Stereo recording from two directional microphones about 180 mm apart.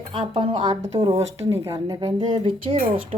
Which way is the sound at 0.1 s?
30° right (ahead or behind).